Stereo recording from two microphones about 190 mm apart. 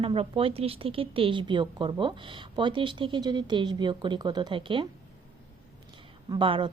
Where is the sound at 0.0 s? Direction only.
30° right (ahead or behind).